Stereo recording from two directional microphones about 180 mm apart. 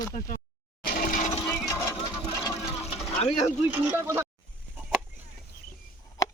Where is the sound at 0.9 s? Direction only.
55° left (ahead or behind).